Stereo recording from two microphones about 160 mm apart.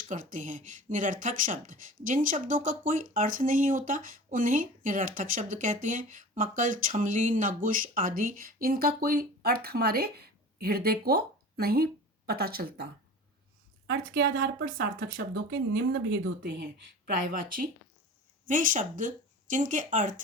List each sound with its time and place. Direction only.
0.1 s speech: 55° right (ahead or behind); by 12.9 s 75° right (ahead or behind)
14.1 s speech: 90° right
18.4 s speech: 55° right (ahead or behind)